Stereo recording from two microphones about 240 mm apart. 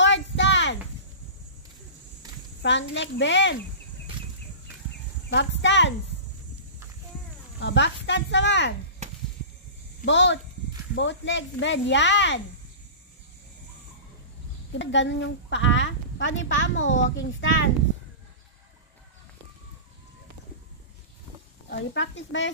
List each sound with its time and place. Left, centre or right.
0.0 s a sound: left
2.6 s a woman's voice: left
5.3 s a woman's voice: left
7.6 s a woman's voice: left
10.0 s a woman's voice: left
14.7 s a woman's voice: left
21.6 s a woman's voice: left